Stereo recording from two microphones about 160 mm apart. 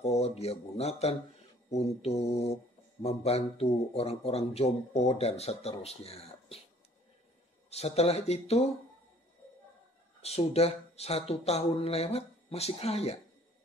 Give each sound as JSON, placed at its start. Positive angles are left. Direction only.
{"t": 0.0, "sound": "speech", "side_deg": 40}
{"t": 7.7, "sound": "speech", "side_deg": 40}
{"t": 10.2, "sound": "speech", "side_deg": 40}